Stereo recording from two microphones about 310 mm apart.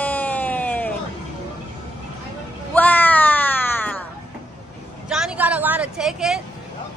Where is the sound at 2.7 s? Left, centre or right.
Centre.